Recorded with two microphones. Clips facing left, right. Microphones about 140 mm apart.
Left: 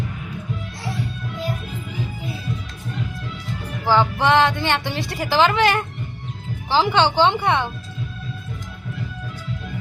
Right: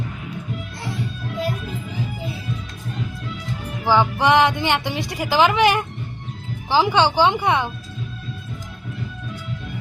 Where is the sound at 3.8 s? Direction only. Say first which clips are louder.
Right 1 dB; 15° right (ahead or behind).